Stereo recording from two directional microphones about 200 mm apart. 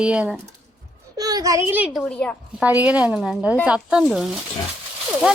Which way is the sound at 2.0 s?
5° left (ahead or behind).